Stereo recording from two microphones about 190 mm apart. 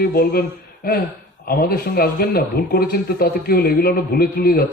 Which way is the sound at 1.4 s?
50° left (ahead or behind).